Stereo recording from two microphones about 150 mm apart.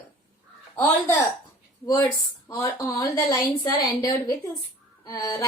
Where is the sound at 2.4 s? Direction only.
20° left (ahead or behind).